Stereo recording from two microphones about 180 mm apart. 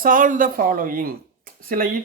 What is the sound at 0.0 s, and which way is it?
Speech, 50° right (ahead or behind).